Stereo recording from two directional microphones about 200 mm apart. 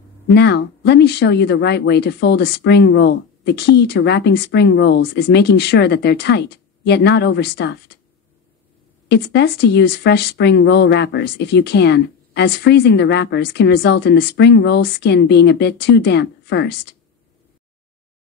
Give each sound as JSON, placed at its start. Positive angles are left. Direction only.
{"t": 0.3, "sound": "speech", "side_deg": 55}
{"t": 9.1, "sound": "speech", "side_deg": 55}